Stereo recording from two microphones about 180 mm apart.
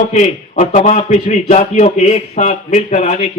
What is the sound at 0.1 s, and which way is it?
A man's voice, 40° left (ahead or behind).